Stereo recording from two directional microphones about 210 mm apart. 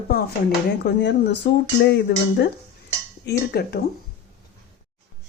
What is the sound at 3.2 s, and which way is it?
Speech, 50° left (ahead or behind).